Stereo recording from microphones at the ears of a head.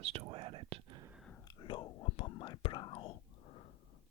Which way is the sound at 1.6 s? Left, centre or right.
Left.